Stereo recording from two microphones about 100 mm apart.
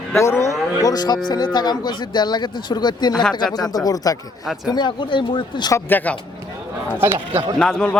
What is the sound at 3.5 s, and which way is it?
Speech, 40° left (ahead or behind).